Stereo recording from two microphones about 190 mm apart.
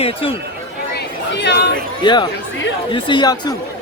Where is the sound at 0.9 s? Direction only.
60° left (ahead or behind).